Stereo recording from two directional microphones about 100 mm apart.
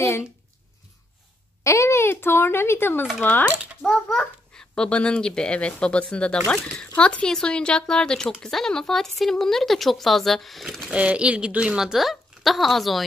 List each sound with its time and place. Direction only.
1.6 s speech: 30° left (ahead or behind)
3.8 s a child's voice: 5° left (ahead or behind)
11.0 s speech: 10° right (ahead or behind)